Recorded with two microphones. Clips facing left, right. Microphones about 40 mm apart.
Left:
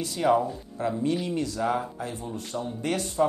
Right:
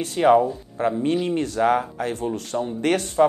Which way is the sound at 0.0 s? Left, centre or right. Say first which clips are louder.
Right 6 dB; right.